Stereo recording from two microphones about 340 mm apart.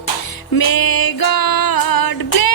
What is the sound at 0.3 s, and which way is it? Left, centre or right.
Music, left.